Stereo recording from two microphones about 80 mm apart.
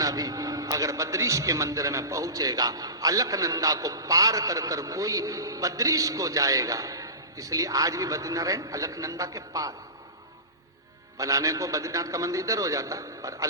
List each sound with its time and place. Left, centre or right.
0.0 s a man's voice: right
11.2 s a man's voice: right